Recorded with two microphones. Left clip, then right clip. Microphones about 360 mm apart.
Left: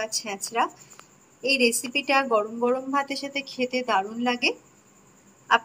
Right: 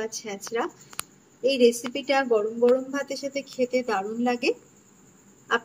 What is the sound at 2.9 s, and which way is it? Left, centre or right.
Speech, left.